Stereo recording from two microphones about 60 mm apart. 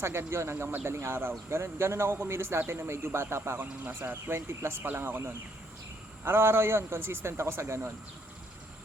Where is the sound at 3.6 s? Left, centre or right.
Right.